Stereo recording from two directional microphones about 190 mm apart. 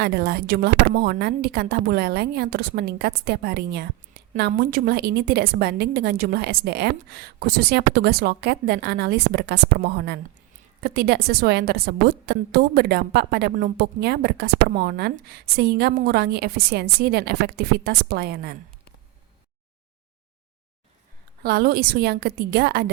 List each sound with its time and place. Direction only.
0.0 s a woman's voice: 55° right (ahead or behind)
21.4 s a woman's voice: 55° right (ahead or behind)